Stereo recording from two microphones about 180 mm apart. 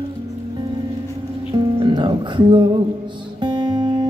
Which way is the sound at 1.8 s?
25° right (ahead or behind).